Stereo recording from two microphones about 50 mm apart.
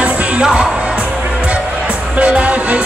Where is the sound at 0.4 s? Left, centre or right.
Centre.